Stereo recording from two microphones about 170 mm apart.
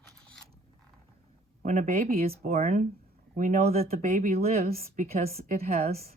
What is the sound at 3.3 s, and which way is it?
Speech, 50° right (ahead or behind).